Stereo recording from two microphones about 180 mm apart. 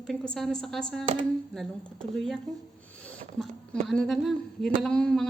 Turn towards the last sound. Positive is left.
turn(degrees=5)  # may be behind; listen again after turning